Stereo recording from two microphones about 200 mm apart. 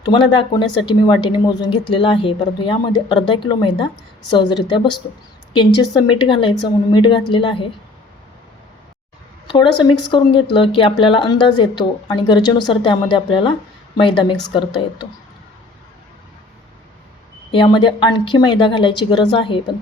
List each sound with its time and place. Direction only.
0.0 s speech: 20° left (ahead or behind)
9.5 s speech: 25° left (ahead or behind)
17.5 s speech: 25° left (ahead or behind)